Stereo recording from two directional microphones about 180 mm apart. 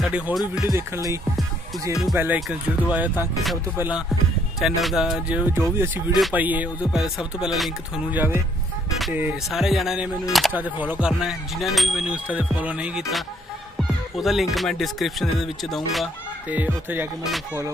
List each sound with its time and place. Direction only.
0.0 s speech: centre (ahead or behind)
0.6 s music: 15° right (ahead or behind)
4.6 s speech: centre (ahead or behind)